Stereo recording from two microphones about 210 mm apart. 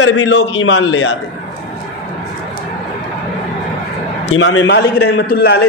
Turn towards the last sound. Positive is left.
turn(degrees=50)  # may be behind; listen again after turning